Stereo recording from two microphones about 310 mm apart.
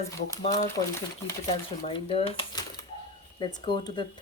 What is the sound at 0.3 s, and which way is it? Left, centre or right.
Speech, centre.